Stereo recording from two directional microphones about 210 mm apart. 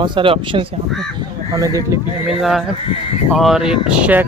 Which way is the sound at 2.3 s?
Centre (ahead or behind).